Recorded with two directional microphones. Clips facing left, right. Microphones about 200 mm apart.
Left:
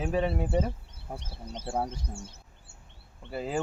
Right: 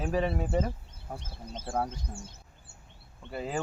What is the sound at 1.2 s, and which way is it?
Speech, 65° left (ahead or behind).